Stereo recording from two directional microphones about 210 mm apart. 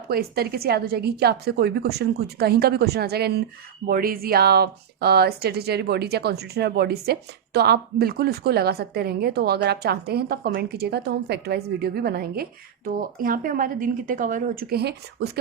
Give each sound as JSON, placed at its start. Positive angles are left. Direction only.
{"t": 0.1, "sound": "speech", "side_deg": -45}